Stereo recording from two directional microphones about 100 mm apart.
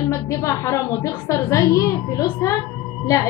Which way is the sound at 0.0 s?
30° left (ahead or behind).